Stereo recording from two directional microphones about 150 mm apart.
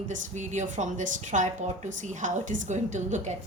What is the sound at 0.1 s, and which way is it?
A woman's voice, 55° right (ahead or behind).